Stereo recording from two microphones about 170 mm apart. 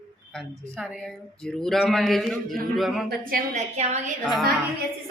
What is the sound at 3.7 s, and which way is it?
Speech, 40° right (ahead or behind).